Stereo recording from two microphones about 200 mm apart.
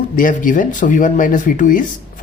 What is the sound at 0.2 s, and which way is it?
Speech, 40° left (ahead or behind).